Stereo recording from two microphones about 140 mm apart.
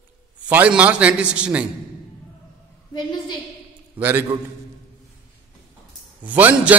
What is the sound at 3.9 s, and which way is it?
Speech, 15° right (ahead or behind).